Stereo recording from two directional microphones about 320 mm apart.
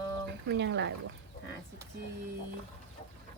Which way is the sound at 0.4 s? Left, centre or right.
Right.